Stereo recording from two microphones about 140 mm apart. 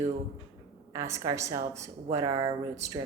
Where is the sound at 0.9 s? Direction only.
20° right (ahead or behind).